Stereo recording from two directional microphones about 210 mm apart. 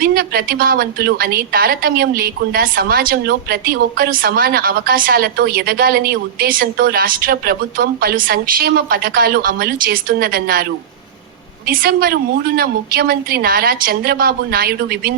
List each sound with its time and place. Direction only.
0.0 s a woman's voice: 45° right (ahead or behind)
11.7 s a woman's voice: 45° right (ahead or behind)